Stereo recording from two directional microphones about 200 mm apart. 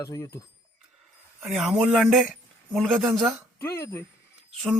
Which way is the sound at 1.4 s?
Centre (ahead or behind).